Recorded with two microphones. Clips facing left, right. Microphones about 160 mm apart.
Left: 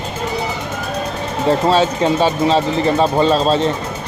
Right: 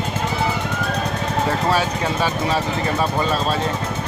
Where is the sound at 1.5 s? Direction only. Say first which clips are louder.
Left 9 dB; 25° left (ahead or behind).